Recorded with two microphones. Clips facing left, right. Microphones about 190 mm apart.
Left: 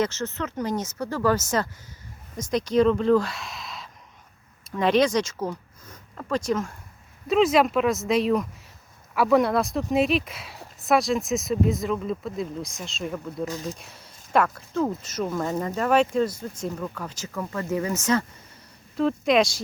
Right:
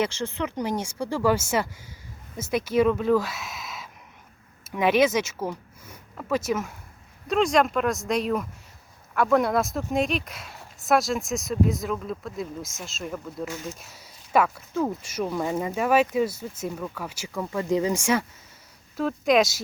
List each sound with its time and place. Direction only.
0.0 s speech: 10° right (ahead or behind)
13.4 s speech: 35° left (ahead or behind)
13.7 s speech: 5° right (ahead or behind)